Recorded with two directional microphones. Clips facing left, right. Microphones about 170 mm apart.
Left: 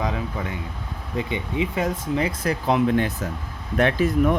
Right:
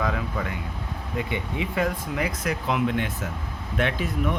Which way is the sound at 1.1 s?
20° left (ahead or behind).